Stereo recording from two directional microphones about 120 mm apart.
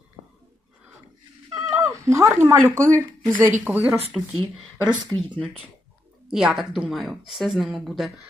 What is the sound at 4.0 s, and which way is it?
Speech, 55° right (ahead or behind).